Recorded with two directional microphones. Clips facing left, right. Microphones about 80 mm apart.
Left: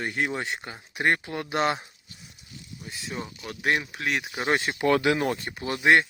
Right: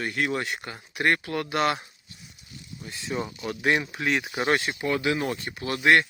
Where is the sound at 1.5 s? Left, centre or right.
Left.